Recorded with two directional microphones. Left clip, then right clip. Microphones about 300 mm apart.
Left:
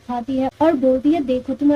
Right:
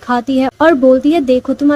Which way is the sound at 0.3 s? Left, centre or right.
Right.